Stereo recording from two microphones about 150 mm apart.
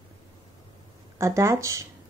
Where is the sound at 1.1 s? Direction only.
20° right (ahead or behind).